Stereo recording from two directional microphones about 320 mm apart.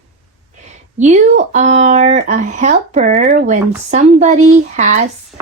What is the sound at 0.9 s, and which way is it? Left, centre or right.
Speech, right.